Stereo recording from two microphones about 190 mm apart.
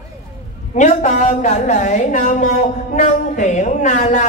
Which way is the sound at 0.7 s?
40° left (ahead or behind).